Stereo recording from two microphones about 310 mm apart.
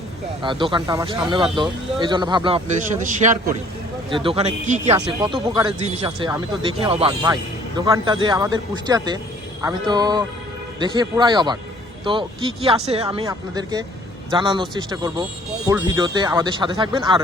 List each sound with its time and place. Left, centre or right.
0.4 s speech: centre